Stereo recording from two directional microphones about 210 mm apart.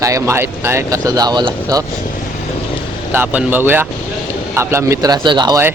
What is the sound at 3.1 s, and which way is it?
Speech, 10° right (ahead or behind).